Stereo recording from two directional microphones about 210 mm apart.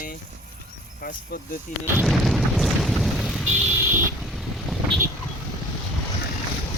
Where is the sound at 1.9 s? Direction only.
Centre (ahead or behind).